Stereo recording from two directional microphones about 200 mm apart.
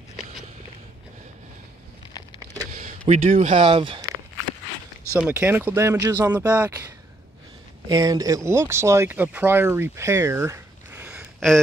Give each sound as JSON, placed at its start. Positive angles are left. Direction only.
{"t": 2.7, "sound": "speech", "side_deg": -35}
{"t": 5.1, "sound": "speech", "side_deg": -10}
{"t": 7.9, "sound": "speech", "side_deg": -20}
{"t": 11.3, "sound": "a sound", "side_deg": 0}